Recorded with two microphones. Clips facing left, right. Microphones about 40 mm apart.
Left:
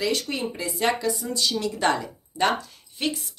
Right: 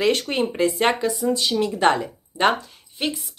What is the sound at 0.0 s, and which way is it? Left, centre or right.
Speech, right.